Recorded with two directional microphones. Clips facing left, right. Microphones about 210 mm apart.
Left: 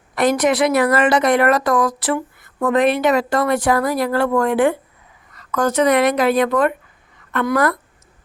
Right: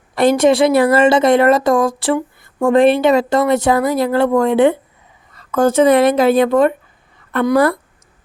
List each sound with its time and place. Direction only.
0.2 s a woman's voice: 25° right (ahead or behind)